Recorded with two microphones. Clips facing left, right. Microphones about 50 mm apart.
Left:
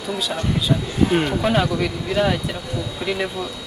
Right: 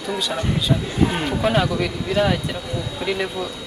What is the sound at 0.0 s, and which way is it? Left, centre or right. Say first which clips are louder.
Speech: even; centre.